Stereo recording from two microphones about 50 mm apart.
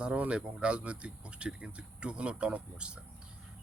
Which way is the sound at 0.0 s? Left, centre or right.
Right.